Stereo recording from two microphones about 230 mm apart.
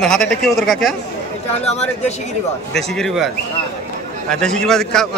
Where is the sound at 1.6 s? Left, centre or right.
Left.